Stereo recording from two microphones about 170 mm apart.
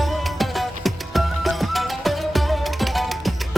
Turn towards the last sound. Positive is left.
turn(degrees=0)  # may be behind; listen again after turning